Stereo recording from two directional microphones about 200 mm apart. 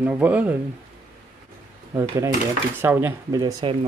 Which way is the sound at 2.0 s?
15° right (ahead or behind).